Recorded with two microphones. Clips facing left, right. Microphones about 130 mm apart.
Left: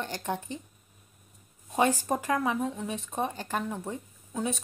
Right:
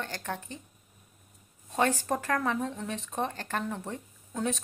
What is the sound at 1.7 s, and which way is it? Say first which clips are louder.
Speech: left 2 dB; 15° left (ahead or behind).